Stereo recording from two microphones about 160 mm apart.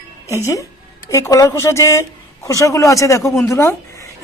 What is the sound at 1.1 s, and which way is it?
Speech, 20° left (ahead or behind).